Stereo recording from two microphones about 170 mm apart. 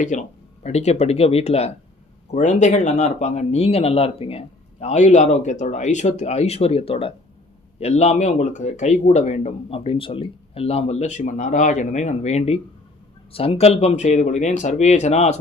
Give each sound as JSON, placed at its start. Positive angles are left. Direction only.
{"t": 0.0, "sound": "speech", "side_deg": 45}